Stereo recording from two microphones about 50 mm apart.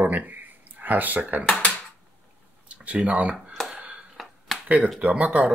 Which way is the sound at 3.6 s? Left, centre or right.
Centre.